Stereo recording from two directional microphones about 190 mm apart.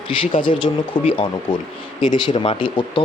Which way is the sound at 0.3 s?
25° left (ahead or behind).